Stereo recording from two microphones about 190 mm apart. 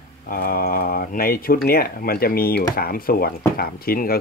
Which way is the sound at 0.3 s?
50° left (ahead or behind).